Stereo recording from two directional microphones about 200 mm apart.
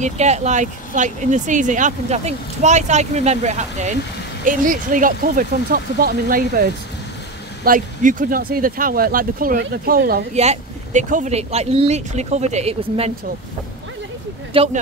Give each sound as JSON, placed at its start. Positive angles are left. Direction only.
{"t": 0.0, "sound": "speech", "side_deg": -35}
{"t": 10.3, "sound": "speech", "side_deg": -35}
{"t": 14.5, "sound": "speech", "side_deg": -30}